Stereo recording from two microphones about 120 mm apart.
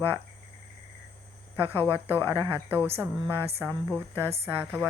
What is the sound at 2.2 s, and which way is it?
Speech, 30° right (ahead or behind).